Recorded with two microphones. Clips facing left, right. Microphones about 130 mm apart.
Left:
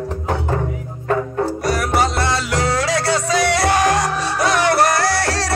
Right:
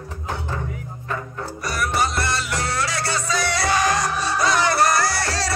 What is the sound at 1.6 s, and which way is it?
Music, 90° left.